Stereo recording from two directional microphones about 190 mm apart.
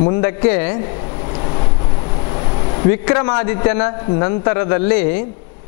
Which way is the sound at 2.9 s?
10° left (ahead or behind).